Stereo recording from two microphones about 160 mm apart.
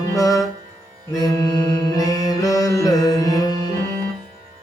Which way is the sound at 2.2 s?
20° left (ahead or behind).